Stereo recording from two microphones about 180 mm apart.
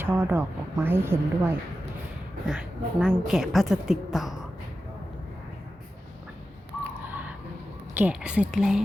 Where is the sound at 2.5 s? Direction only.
5° right (ahead or behind).